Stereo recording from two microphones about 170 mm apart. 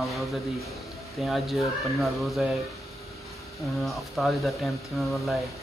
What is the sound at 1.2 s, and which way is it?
Speech, centre (ahead or behind).